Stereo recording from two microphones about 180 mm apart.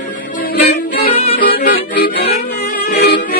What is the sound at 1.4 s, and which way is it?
Music, 60° left (ahead or behind).